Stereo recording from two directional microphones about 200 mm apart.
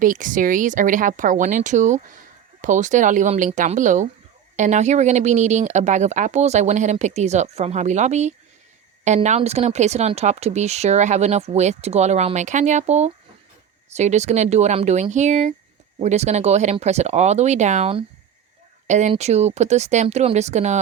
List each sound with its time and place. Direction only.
0.0 s speech: 40° right (ahead or behind)